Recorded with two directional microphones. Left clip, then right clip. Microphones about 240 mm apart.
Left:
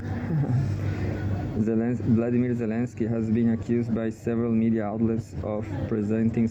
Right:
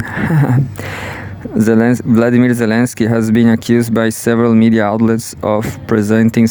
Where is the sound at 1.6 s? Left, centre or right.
Right.